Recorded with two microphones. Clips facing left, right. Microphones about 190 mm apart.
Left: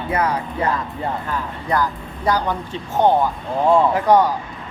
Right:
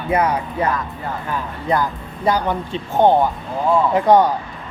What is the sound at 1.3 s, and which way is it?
Speech, 20° right (ahead or behind).